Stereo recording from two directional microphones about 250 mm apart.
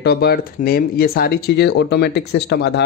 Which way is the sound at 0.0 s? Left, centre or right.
Left.